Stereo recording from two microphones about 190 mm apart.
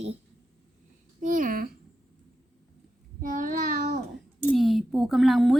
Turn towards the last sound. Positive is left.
turn(degrees=0)  # may be behind; listen again after turning